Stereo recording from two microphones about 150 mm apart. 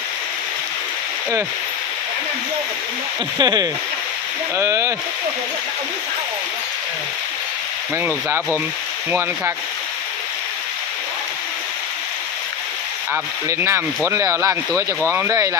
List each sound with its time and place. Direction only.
3.3 s speech: 30° right (ahead or behind)
7.9 s speech: 15° right (ahead or behind)
13.5 s speech: 15° right (ahead or behind)